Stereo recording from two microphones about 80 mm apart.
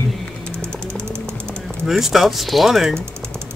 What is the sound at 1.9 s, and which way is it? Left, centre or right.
Speech, centre.